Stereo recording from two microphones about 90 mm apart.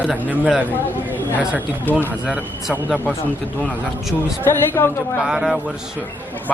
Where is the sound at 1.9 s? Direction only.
20° left (ahead or behind).